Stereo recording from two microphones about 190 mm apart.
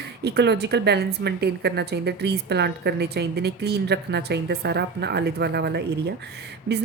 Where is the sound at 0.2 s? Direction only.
60° right (ahead or behind).